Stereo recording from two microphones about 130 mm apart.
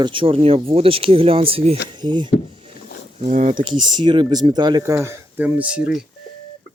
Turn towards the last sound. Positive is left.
turn(degrees=-10)  # may be behind; listen again after turning